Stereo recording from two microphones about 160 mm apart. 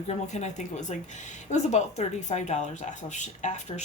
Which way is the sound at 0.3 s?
45° left (ahead or behind).